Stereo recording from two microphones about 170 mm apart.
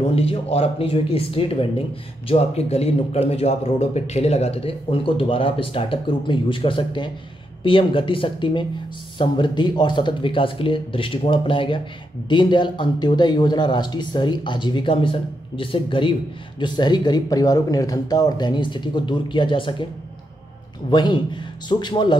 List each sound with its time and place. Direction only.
0.0 s a man's voice: 35° left (ahead or behind)
20.9 s speech: 25° left (ahead or behind)